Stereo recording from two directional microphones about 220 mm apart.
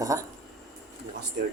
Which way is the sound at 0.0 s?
15° right (ahead or behind).